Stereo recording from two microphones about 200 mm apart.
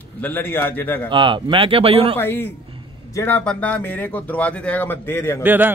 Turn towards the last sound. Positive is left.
turn(degrees=-10)  # may be behind; listen again after turning